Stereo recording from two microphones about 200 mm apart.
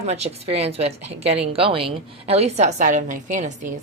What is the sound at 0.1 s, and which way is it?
A woman's voice, 30° right (ahead or behind).